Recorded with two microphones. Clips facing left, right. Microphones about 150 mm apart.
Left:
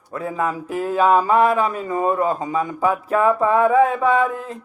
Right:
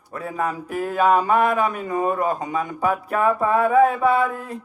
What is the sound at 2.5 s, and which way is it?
Speech, 45° right (ahead or behind).